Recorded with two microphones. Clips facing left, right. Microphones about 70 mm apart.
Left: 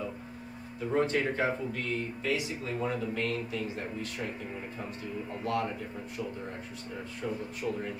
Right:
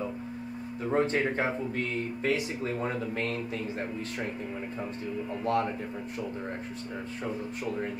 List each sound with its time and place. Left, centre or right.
0.9 s speech: right
5.4 s speech: right